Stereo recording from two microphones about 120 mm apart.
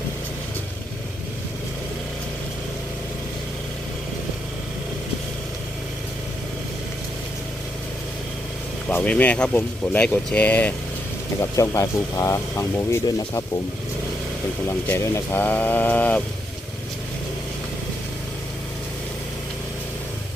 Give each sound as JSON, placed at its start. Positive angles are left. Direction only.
{"t": 8.9, "sound": "speech", "side_deg": 15}
{"t": 11.5, "sound": "speech", "side_deg": 25}
{"t": 14.7, "sound": "speech", "side_deg": 25}